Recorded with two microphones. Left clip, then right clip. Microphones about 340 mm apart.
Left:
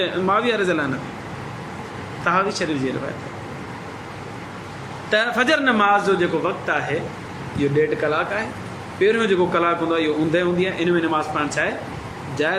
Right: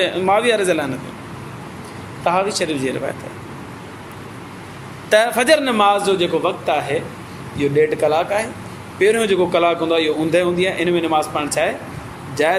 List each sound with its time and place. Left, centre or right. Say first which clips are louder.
0.0 s a man's voice: right 4 dB; centre
2.2 s a man's voice: right 2 dB; centre
5.1 s a man's voice: right 5 dB; centre